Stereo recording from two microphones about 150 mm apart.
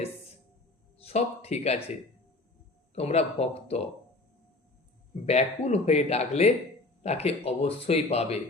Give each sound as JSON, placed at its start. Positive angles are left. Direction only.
{"t": 0.9, "sound": "speech", "side_deg": 45}
{"t": 2.9, "sound": "speech", "side_deg": 45}
{"t": 5.2, "sound": "speech", "side_deg": 45}